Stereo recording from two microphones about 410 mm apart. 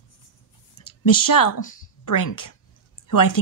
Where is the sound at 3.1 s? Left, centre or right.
Left.